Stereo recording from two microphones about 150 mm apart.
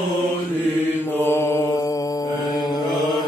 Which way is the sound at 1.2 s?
15° left (ahead or behind).